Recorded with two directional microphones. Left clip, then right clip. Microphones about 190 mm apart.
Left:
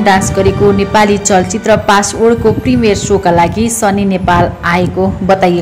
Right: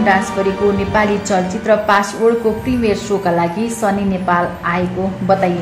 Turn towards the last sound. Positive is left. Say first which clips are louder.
# left 5 dB
turn(degrees=25)  # may be behind; listen again after turning